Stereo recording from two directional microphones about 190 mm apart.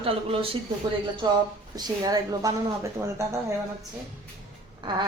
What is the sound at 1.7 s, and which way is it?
A man's voice, 20° right (ahead or behind).